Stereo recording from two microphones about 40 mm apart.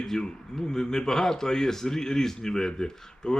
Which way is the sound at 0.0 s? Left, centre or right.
Centre.